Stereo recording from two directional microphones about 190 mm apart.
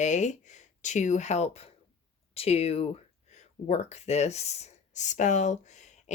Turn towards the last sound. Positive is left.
turn(degrees=40)  # may be behind; listen again after turning